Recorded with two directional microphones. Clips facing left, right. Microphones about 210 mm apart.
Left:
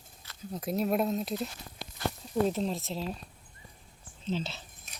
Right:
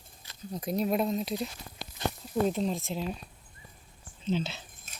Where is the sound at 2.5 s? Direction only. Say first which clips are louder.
Right 1 dB; centre (ahead or behind).